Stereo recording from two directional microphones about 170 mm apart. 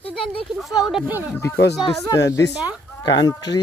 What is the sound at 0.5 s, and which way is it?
Speech, centre (ahead or behind).